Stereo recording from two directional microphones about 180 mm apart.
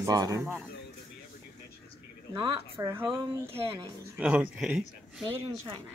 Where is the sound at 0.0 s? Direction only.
20° right (ahead or behind).